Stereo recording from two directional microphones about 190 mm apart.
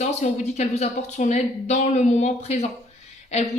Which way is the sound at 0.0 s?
35° left (ahead or behind).